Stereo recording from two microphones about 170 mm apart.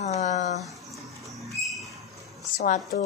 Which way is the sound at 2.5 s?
55° left (ahead or behind).